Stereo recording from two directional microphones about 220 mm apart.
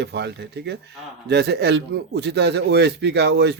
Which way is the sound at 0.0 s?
50° right (ahead or behind).